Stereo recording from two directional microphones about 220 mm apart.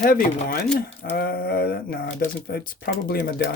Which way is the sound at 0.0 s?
40° left (ahead or behind).